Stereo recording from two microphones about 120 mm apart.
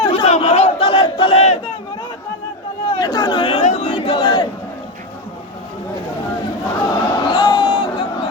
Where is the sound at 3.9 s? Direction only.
45° left (ahead or behind).